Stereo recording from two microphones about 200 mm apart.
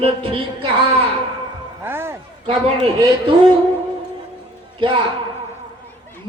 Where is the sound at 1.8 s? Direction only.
10° right (ahead or behind).